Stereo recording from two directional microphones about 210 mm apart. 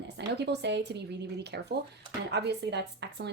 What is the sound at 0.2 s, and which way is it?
A woman's voice, 55° right (ahead or behind).